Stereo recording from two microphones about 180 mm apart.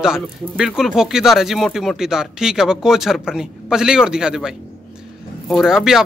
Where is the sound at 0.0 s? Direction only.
5° right (ahead or behind).